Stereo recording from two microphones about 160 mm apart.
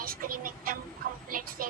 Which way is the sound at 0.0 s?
65° right (ahead or behind).